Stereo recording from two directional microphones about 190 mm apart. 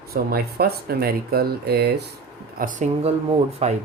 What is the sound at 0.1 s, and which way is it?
Speech, 55° right (ahead or behind).